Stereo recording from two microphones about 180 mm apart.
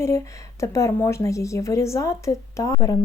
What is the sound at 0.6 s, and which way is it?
Speech, 15° left (ahead or behind).